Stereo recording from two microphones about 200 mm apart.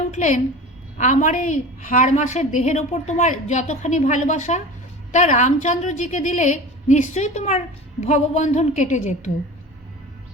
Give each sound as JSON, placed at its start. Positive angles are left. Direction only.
{"t": 0.0, "sound": "a woman's voice", "side_deg": 35}